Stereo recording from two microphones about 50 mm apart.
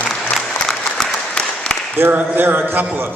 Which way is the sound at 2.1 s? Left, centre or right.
Right.